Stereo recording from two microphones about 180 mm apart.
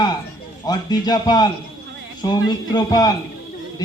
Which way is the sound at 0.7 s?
20° left (ahead or behind).